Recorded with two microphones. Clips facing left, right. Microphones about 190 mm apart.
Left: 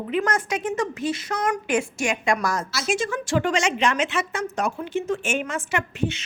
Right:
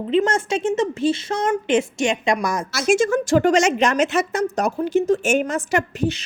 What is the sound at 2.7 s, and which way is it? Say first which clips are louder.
A woman's voice: right 8 dB; 50° right (ahead or behind).